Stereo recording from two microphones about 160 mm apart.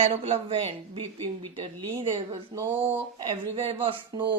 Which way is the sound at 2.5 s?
15° right (ahead or behind).